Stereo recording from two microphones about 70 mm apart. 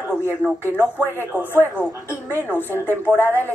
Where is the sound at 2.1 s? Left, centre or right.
Right.